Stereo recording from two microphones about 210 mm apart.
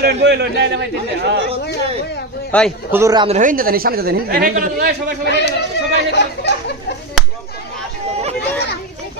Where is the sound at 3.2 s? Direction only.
35° right (ahead or behind).